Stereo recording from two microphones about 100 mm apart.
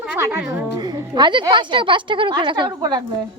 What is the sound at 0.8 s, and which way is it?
A woman's voice, 45° right (ahead or behind).